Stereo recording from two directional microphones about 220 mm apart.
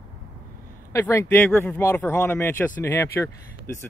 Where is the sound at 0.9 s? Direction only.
10° left (ahead or behind).